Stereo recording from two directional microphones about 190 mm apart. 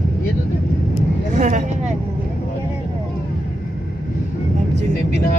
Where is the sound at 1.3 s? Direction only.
40° right (ahead or behind).